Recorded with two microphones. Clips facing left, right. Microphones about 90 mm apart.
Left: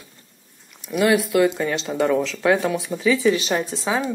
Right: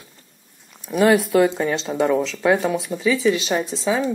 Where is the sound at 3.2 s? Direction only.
15° left (ahead or behind).